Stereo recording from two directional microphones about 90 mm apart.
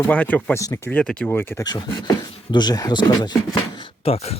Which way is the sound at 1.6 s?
50° left (ahead or behind).